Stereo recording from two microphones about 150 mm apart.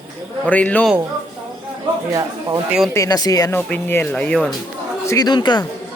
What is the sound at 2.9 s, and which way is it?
Speech, 25° left (ahead or behind).